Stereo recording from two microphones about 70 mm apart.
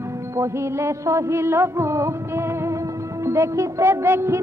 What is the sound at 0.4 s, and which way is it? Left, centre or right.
A woman's voice, right.